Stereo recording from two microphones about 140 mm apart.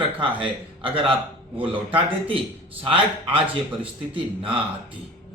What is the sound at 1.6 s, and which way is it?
Speech, 40° right (ahead or behind).